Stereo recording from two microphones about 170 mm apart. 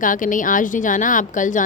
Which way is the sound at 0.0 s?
50° left (ahead or behind).